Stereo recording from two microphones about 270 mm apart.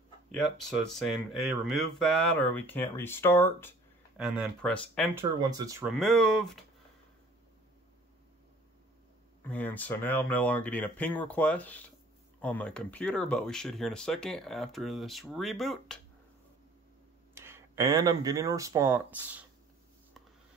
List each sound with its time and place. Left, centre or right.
0.6 s speech: centre
4.2 s speech: centre
5.1 s speech: centre
9.4 s speech: centre
17.3 s speech: centre